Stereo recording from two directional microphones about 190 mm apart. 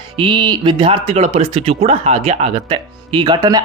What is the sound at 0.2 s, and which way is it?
Speech, 25° right (ahead or behind).